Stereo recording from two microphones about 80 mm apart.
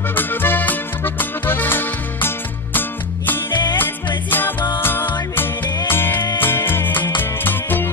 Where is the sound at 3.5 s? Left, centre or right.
Left.